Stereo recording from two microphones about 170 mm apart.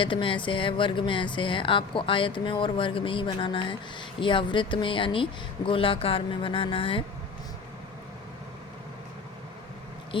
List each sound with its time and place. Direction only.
0.0 s speech: 30° left (ahead or behind)